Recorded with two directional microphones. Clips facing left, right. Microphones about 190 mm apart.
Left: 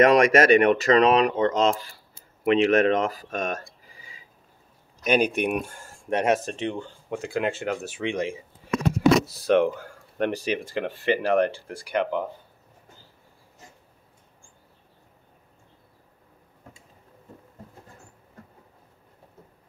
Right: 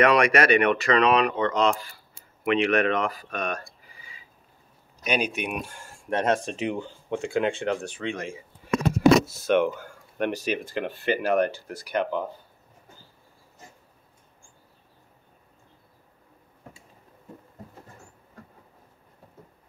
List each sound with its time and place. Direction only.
0.0 s speech: 45° left (ahead or behind)
3.8 s a sound: 40° left (ahead or behind)
5.0 s speech: 50° left (ahead or behind)
6.0 s speech: 15° left (ahead or behind)
6.5 s speech: 5° right (ahead or behind)
8.0 s speech: 15° left (ahead or behind)
9.3 s speech: 35° left (ahead or behind)